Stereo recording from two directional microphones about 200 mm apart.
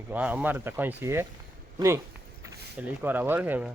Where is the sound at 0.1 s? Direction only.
5° right (ahead or behind).